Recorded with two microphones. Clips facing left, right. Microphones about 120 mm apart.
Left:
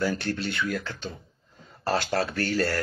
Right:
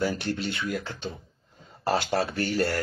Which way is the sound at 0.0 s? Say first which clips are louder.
Even; 20° right (ahead or behind).